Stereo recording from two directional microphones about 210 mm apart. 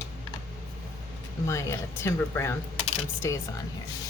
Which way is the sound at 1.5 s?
15° left (ahead or behind).